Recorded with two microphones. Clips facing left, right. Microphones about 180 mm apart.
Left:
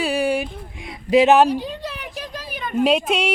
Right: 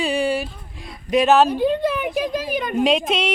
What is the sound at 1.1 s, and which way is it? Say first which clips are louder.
Speech: left 3 dB; 25° left (ahead or behind).